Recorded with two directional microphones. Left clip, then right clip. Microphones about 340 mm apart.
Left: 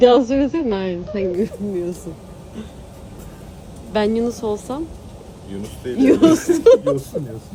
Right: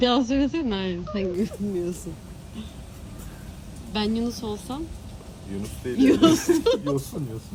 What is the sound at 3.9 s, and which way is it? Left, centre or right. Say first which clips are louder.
A woman's voice: left 9 dB; centre.